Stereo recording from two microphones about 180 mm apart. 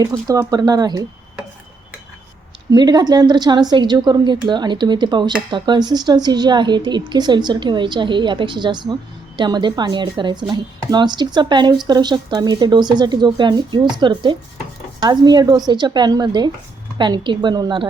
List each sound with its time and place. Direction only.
0.0 s speech: 20° right (ahead or behind)
2.6 s speech: 20° right (ahead or behind)